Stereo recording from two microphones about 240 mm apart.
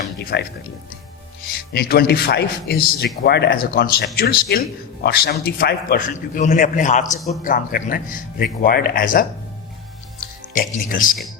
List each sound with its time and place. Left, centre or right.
0.2 s speech: left
1.7 s a man's voice: left
10.5 s a man's voice: left